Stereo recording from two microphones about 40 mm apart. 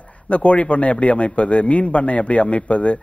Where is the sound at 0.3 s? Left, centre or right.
Left.